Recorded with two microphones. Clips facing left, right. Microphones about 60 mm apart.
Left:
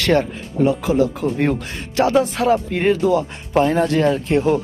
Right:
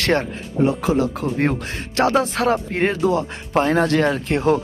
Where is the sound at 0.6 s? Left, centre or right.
Right.